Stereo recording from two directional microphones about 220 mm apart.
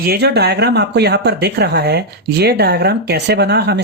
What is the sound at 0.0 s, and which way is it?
Speech, 45° right (ahead or behind).